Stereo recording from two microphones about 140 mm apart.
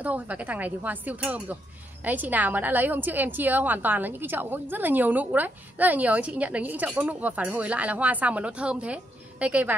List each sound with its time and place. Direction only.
0.0 s a woman's voice: 10° right (ahead or behind)